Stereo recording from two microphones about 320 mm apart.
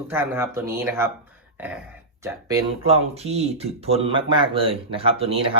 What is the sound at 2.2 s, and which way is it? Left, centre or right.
Speech, centre.